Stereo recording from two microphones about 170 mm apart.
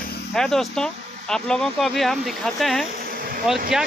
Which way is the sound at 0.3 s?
Centre (ahead or behind).